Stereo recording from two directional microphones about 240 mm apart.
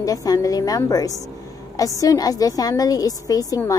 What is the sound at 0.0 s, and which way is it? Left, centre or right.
A woman's voice, centre.